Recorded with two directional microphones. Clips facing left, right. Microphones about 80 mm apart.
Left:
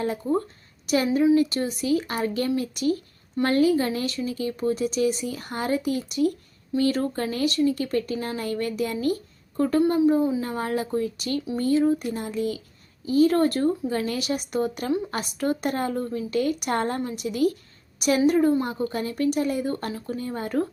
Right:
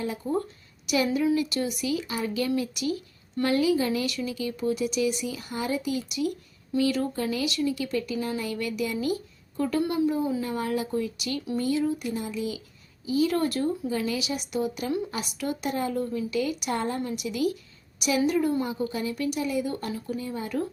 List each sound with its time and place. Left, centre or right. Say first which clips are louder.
0.9 s speech: left 4 dB; left
17.0 s speech: left 4 dB; left